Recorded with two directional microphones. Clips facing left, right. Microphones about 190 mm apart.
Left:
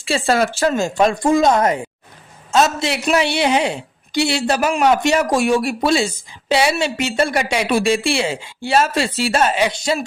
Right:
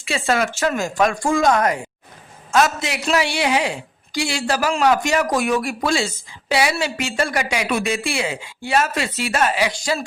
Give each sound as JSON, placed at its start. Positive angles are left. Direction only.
{"t": 0.0, "sound": "a woman's voice", "side_deg": 35}